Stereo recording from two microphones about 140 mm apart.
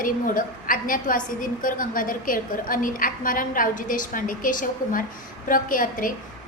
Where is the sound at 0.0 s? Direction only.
80° left.